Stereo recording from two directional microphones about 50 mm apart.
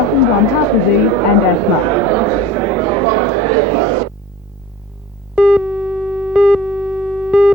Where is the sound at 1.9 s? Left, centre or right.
Right.